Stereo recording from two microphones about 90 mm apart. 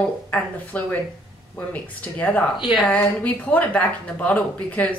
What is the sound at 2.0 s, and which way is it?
Speech, 15° left (ahead or behind).